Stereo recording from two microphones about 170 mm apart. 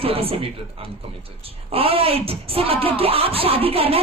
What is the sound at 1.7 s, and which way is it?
Speech, 35° right (ahead or behind).